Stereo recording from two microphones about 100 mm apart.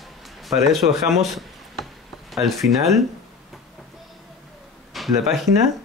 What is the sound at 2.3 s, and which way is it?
Speech, centre (ahead or behind).